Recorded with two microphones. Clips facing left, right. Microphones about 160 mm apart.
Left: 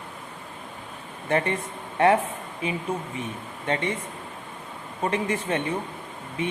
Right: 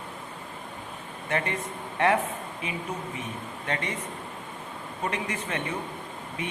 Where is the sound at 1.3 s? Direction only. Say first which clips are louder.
Left 5 dB; 30° left (ahead or behind).